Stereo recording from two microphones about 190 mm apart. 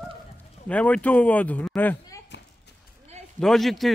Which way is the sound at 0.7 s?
5° left (ahead or behind).